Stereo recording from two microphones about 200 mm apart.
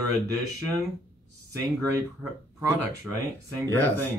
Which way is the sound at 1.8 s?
15° right (ahead or behind).